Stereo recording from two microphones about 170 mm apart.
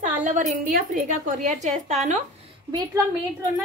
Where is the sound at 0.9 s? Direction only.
50° right (ahead or behind).